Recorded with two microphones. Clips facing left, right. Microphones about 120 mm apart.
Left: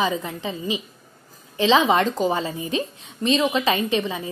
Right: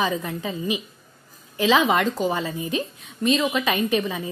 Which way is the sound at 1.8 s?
30° left (ahead or behind).